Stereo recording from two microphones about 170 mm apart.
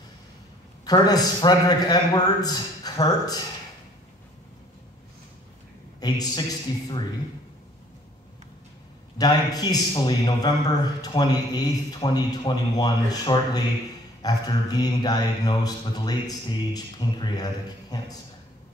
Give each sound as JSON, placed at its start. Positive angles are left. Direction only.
{"t": 0.8, "sound": "a man's voice", "side_deg": 20}
{"t": 5.9, "sound": "a man's voice", "side_deg": 25}
{"t": 9.2, "sound": "a man's voice", "side_deg": 20}